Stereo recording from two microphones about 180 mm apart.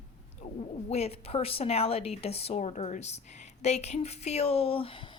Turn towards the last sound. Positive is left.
turn(degrees=30)  # may be behind; listen again after turning